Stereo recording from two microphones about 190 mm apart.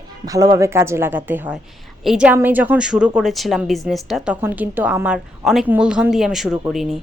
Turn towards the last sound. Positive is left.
turn(degrees=0)  # may be behind; listen again after turning